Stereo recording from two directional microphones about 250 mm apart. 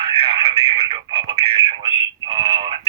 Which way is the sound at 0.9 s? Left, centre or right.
Centre.